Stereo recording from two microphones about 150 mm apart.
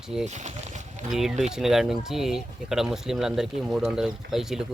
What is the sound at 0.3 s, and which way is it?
Speech, 50° right (ahead or behind).